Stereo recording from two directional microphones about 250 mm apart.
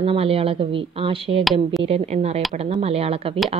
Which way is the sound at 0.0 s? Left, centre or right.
Right.